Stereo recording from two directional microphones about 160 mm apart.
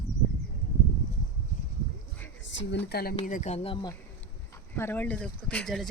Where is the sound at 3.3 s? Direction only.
50° left (ahead or behind); by 3.9 s 30° left (ahead or behind).